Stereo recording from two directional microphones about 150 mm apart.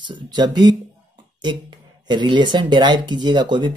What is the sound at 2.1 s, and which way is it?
Speech, 30° right (ahead or behind).